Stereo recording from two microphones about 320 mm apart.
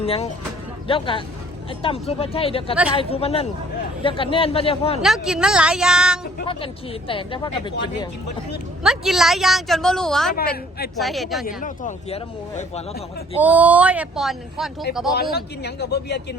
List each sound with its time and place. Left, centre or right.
0.0 s a man's voice: centre
5.0 s a woman's voice: centre
7.1 s a man's voice: centre
8.8 s a woman's voice: centre
10.3 s speech: left
10.9 s a woman's voice: centre
11.4 s speech: left
13.4 s a woman's voice: centre
15.1 s speech: left